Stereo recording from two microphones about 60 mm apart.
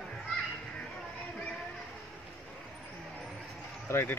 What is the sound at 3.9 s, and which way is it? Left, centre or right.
Speech, left.